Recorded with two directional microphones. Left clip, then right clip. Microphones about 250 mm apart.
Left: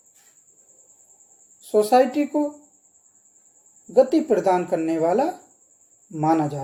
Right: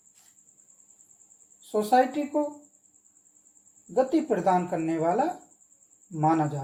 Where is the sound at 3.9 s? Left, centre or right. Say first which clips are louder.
Left 7 dB; left.